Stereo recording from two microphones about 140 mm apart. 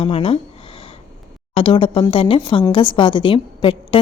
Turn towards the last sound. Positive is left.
turn(degrees=40)  # may be behind; listen again after turning